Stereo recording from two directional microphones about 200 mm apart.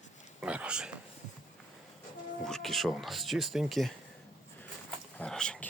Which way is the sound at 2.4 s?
Centre (ahead or behind).